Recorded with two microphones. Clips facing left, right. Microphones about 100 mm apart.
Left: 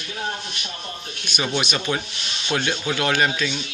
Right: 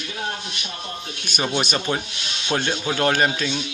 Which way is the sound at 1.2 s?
45° right (ahead or behind).